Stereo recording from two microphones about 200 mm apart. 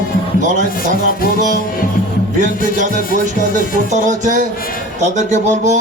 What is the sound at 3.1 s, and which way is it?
Music, 40° right (ahead or behind).